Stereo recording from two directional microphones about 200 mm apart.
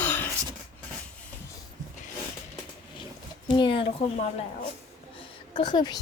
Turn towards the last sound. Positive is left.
turn(degrees=20)  # may be behind; listen again after turning